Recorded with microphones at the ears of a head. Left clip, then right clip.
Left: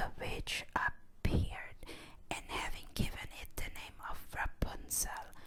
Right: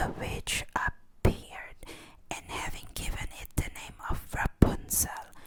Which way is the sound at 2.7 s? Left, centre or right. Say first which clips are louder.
Right 3 dB; right.